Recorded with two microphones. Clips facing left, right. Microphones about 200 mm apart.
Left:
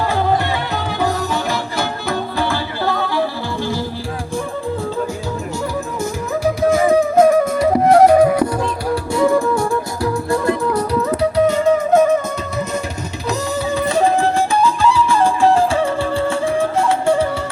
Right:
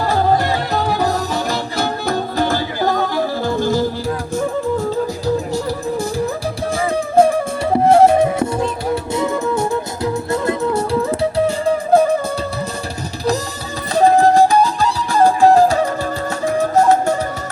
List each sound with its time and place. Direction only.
0.1 s music: 40° right (ahead or behind)
6.6 s music: 30° right (ahead or behind)
13.9 s music: 40° right (ahead or behind)